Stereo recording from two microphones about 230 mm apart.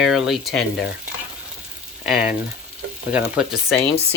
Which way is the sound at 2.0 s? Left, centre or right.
Centre.